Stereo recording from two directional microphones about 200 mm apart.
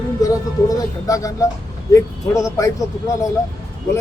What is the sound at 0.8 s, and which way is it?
A man's voice, 15° left (ahead or behind).